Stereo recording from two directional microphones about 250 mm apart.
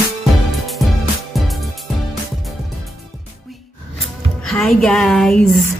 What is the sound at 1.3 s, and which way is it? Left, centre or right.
Music, centre.